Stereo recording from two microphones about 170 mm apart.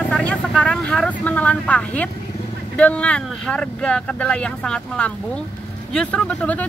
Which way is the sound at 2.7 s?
5° left (ahead or behind).